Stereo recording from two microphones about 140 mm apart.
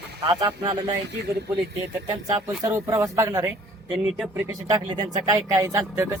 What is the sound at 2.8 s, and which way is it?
Speech, 25° right (ahead or behind).